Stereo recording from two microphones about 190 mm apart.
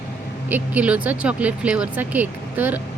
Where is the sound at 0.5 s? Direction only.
5° right (ahead or behind).